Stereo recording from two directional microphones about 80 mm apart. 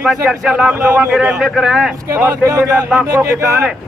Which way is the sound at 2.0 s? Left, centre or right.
Right.